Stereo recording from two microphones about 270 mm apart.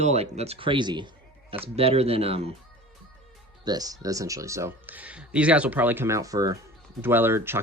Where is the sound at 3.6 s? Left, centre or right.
Centre.